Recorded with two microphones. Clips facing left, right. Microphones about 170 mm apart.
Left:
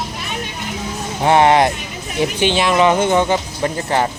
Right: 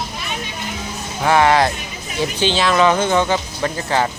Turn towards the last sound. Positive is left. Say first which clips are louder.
# left 1 dB
turn(degrees=20)  # may be behind; listen again after turning